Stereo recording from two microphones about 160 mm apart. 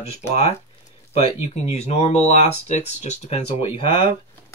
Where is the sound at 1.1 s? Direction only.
45° left (ahead or behind).